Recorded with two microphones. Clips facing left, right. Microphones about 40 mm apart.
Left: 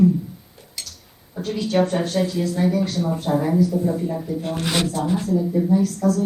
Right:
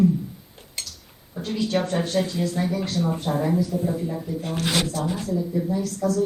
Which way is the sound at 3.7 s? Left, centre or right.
Right.